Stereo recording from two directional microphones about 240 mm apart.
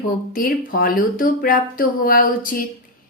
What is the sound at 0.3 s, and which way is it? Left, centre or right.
Speech, left.